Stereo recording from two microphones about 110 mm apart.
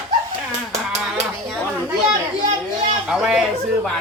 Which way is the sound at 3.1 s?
5° right (ahead or behind).